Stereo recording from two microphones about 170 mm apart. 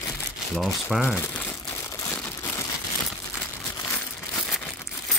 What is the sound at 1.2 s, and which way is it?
Crumpling, 10° left (ahead or behind).